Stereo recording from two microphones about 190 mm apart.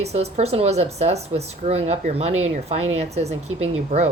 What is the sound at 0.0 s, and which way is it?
Speech, 35° right (ahead or behind).